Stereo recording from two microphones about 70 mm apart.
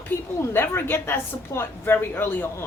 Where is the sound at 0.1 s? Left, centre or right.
Left.